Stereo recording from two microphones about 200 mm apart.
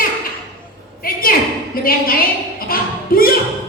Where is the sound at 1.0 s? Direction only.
45° left (ahead or behind).